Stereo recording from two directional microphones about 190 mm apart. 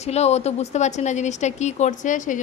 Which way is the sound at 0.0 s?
35° left (ahead or behind).